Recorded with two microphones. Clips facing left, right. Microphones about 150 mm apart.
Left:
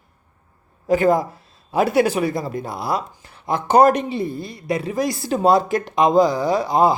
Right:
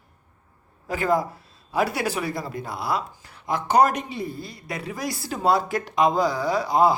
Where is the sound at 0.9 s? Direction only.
20° left (ahead or behind).